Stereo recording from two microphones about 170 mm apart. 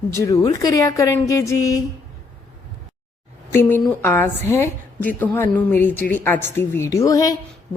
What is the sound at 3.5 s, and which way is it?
A woman's voice, 15° left (ahead or behind).